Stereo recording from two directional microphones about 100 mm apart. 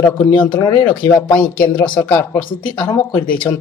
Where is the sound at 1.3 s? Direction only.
15° left (ahead or behind).